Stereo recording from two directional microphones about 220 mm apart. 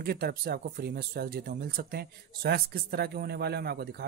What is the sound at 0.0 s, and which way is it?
Speech, 45° right (ahead or behind).